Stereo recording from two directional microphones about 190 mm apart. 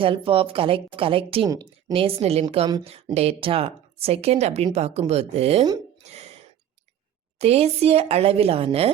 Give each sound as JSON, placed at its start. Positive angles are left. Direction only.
{"t": 0.0, "sound": "a woman's voice", "side_deg": -30}
{"t": 6.0, "sound": "a sound", "side_deg": -35}
{"t": 7.3, "sound": "speech", "side_deg": -35}